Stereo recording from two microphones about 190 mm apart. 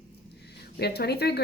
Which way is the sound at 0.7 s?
60° left (ahead or behind).